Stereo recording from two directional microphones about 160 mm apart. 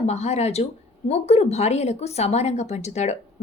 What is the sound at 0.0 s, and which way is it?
Speech, 40° left (ahead or behind).